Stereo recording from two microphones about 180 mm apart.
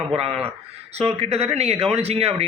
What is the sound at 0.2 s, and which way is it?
Speech, 35° right (ahead or behind).